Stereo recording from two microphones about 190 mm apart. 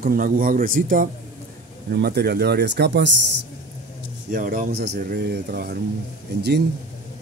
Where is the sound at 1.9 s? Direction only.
60° right (ahead or behind).